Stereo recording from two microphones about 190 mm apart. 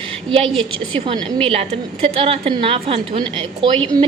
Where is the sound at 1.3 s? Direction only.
30° right (ahead or behind).